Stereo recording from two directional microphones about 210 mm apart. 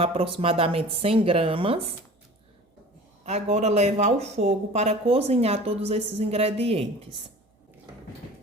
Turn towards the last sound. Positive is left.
turn(degrees=-30)  # may be behind; listen again after turning